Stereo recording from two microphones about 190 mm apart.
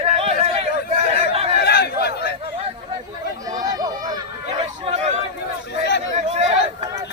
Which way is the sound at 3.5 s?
20° right (ahead or behind).